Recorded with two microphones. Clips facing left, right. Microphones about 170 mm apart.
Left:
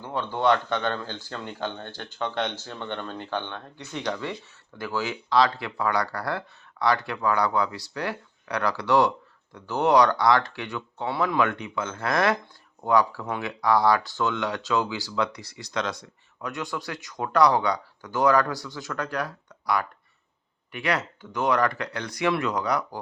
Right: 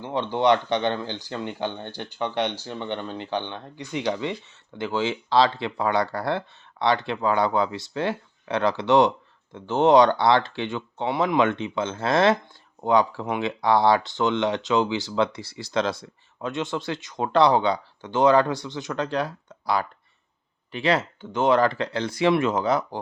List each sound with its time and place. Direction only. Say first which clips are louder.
0.0 s speech: right 3 dB; 20° right (ahead or behind)